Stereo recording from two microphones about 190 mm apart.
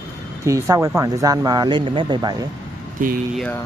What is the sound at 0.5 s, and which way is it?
Speech, 15° right (ahead or behind).